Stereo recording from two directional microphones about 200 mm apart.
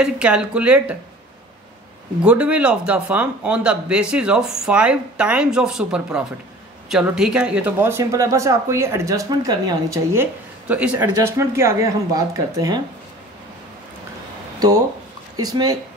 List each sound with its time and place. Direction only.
0.0 s speech: 5° right (ahead or behind)
2.2 s speech: 5° right (ahead or behind)
10.7 s speech: 5° right (ahead or behind)
15.4 s speech: 20° right (ahead or behind)